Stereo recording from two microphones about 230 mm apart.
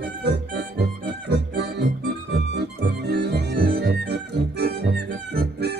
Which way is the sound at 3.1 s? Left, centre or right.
Right.